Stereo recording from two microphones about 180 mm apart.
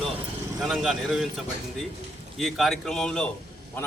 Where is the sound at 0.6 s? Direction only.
Centre (ahead or behind).